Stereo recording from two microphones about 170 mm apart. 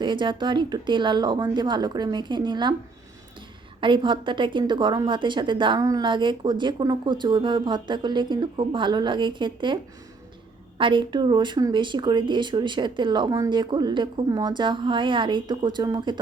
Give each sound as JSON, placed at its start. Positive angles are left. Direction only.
{"t": 0.0, "sound": "a woman's voice", "side_deg": -30}
{"t": 3.8, "sound": "a woman's voice", "side_deg": -30}
{"t": 10.8, "sound": "a woman's voice", "side_deg": -30}